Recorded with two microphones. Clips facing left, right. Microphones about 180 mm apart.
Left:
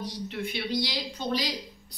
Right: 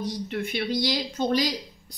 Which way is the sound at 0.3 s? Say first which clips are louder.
Right 2 dB; 50° right (ahead or behind).